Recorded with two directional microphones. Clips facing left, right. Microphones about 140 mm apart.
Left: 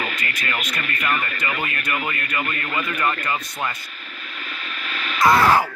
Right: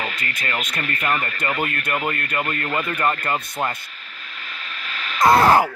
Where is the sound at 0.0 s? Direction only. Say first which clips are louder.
Even; 30° right (ahead or behind).